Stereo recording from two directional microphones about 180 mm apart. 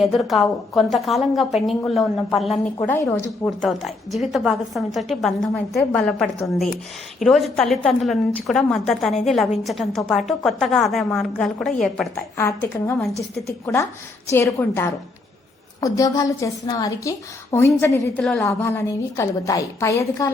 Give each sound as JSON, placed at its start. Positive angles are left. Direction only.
{"t": 0.0, "sound": "a woman's voice", "side_deg": 0}
{"t": 2.8, "sound": "a woman's voice", "side_deg": 15}
{"t": 3.4, "sound": "a woman's voice", "side_deg": 0}
{"t": 12.1, "sound": "a woman's voice", "side_deg": 15}
{"t": 18.2, "sound": "a woman's voice", "side_deg": 0}
{"t": 18.4, "sound": "a woman's voice", "side_deg": 15}